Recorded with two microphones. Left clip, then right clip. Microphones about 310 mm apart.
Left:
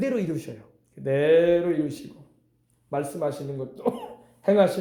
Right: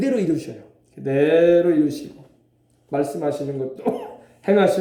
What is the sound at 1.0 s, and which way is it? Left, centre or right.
Mantra, centre.